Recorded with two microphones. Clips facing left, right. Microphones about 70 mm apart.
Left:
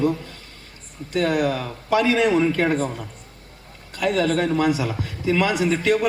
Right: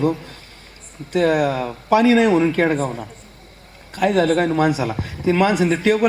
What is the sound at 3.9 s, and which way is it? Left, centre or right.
A man's voice, right.